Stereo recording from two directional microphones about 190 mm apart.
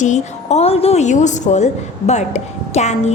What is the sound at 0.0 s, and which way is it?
A woman's voice, 40° left (ahead or behind).